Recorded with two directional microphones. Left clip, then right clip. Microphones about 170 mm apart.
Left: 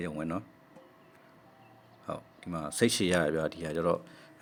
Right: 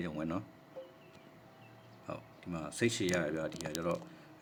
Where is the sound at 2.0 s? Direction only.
25° left (ahead or behind).